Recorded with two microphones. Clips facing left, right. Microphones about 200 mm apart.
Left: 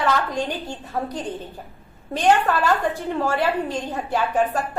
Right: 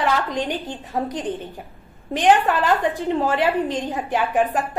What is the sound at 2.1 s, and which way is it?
A woman's voice, 15° right (ahead or behind).